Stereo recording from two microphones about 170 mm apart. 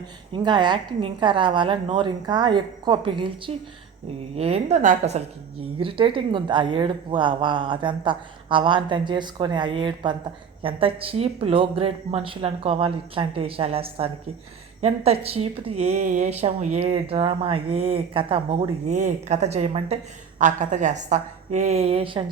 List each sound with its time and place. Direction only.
0.3 s a woman's voice: 25° right (ahead or behind); by 5.2 s 45° right (ahead or behind)
5.8 s a woman's voice: 30° right (ahead or behind)